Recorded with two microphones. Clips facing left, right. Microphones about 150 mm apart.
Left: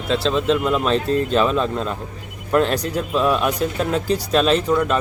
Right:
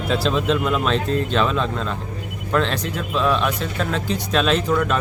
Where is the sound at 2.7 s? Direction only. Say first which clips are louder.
Left 3 dB; 40° left (ahead or behind).